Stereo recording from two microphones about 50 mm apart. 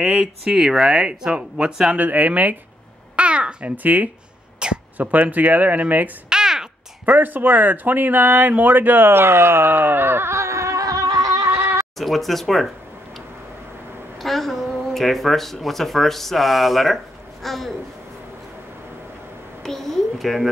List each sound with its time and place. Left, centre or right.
0.0 s speech: centre
2.0 s speech: right
3.2 s babbling: right
3.7 s speech: right
4.6 s speech: centre
4.9 s speech: right
6.2 s a sound: centre
7.1 s speech: right
11.4 s a sound: right
12.0 s speech: centre
14.2 s speech: centre
19.6 s speech: centre